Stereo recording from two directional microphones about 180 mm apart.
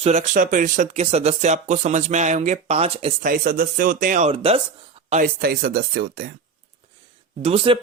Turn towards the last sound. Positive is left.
turn(degrees=-30)  # may be behind; listen again after turning